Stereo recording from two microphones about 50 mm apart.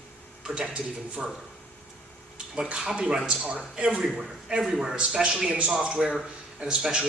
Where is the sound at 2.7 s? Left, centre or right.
Centre.